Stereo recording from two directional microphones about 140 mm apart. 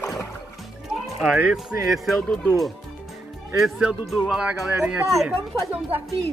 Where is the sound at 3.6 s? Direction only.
5° right (ahead or behind).